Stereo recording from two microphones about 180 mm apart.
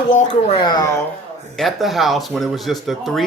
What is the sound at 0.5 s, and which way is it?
Speech, 25° left (ahead or behind).